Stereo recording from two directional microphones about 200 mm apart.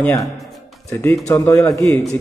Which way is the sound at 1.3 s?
15° left (ahead or behind).